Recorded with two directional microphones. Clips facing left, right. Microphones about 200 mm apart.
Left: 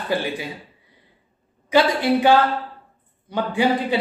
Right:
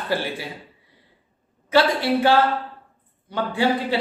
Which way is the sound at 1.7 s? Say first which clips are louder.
Left 1 dB; 15° left (ahead or behind).